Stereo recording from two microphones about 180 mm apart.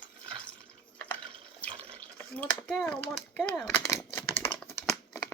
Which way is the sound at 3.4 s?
10° left (ahead or behind).